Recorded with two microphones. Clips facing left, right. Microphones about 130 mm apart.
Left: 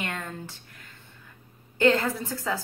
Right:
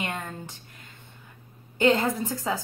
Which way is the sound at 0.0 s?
20° right (ahead or behind).